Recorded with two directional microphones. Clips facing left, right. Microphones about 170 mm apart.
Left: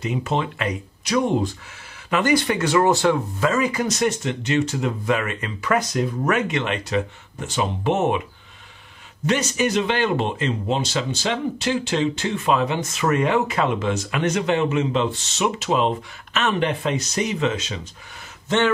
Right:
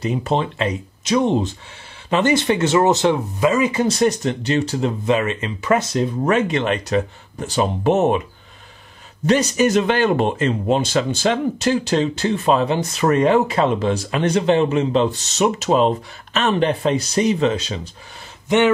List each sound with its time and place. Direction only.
0.0 s speech: 35° right (ahead or behind)
9.2 s speech: 35° right (ahead or behind)
18.5 s speech: 15° right (ahead or behind)